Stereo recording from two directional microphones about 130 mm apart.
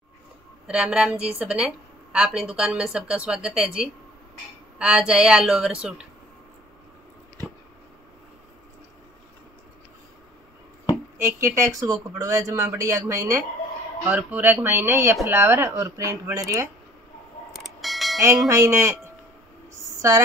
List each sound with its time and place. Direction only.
0.7 s speech: 10° right (ahead or behind)
11.1 s speech: 20° right (ahead or behind)
14.0 s speech: 15° right (ahead or behind)
17.5 s mechanisms: centre (ahead or behind)
18.5 s speech: 20° right (ahead or behind)
20.0 s a woman's voice: 25° right (ahead or behind)